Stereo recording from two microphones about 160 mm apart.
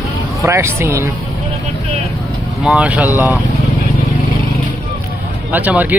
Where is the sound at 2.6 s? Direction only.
10° right (ahead or behind).